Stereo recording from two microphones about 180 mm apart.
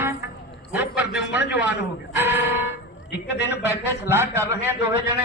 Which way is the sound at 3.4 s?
10° right (ahead or behind).